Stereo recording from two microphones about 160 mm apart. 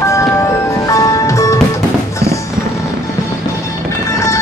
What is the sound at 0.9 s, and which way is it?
Music, 20° left (ahead or behind).